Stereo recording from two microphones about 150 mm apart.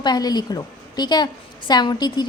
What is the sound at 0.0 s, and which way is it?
A woman's voice, 25° left (ahead or behind).